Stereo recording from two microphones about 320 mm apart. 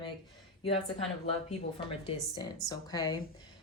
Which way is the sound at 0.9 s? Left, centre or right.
Centre.